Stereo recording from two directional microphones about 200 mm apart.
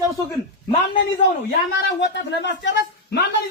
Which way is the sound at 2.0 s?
60° left (ahead or behind).